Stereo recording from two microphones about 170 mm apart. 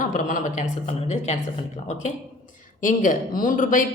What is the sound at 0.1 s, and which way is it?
A woman's voice, 50° left (ahead or behind).